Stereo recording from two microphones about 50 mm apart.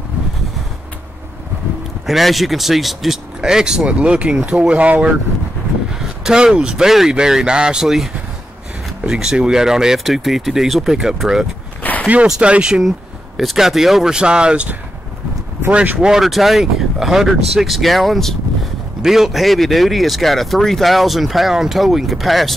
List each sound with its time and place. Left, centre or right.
2.0 s speech: centre
3.3 s speech: centre
5.9 s speech: centre
11.8 s a sound: left
12.4 s speech: right
13.4 s speech: centre
14.1 s speech: centre
15.7 s speech: right
16.2 s speech: centre